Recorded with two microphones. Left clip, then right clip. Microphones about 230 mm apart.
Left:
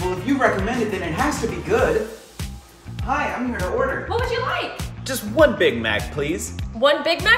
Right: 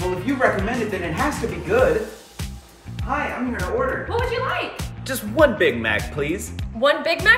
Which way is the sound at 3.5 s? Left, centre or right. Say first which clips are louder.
Even; centre.